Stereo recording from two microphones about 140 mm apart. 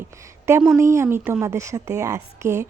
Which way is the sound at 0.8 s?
20° right (ahead or behind).